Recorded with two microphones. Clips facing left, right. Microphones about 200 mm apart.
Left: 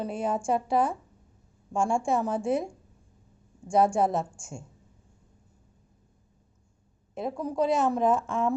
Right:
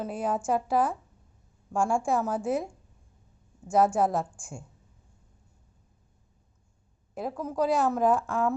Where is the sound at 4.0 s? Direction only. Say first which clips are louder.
Even; 25° left (ahead or behind).